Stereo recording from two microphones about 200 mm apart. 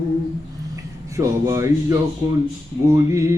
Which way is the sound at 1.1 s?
15° right (ahead or behind).